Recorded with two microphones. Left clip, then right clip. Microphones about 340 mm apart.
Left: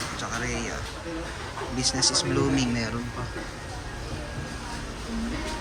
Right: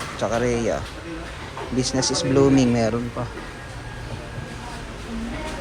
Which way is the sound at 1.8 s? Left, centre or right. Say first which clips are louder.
Right 2 dB; centre.